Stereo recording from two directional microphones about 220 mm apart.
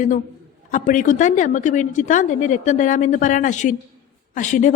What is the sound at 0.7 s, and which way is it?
A woman's voice, 35° left (ahead or behind).